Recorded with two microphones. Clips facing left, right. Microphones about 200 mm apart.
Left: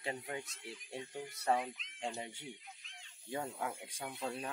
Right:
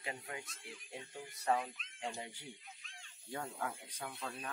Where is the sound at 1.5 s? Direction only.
20° left (ahead or behind).